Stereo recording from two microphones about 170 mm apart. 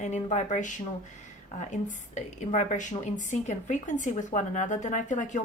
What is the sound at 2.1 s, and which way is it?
A woman's voice, 45° left (ahead or behind).